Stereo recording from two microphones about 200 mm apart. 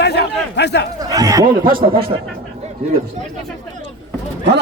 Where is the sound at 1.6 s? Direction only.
45° right (ahead or behind).